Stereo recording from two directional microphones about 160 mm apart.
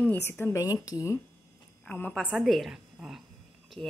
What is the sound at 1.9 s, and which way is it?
A woman's voice, 10° left (ahead or behind).